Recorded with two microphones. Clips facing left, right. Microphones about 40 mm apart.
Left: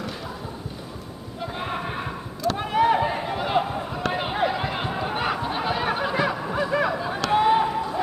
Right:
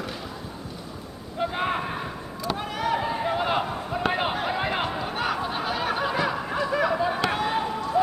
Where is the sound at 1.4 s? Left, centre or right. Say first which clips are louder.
Right 4 dB; centre.